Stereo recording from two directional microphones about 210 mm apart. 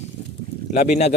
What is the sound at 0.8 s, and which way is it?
Speech, 35° left (ahead or behind).